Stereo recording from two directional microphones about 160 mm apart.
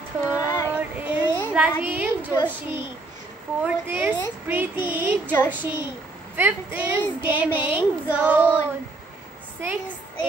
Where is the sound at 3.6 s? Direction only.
10° right (ahead or behind).